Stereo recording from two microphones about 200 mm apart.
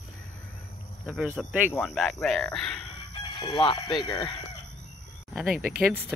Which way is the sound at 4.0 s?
25° left (ahead or behind).